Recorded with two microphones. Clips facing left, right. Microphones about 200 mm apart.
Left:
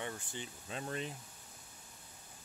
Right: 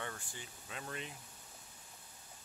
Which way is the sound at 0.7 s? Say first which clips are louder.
Left 5 dB; 35° left (ahead or behind).